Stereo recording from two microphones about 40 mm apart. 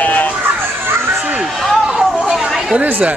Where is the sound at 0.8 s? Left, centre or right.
Right.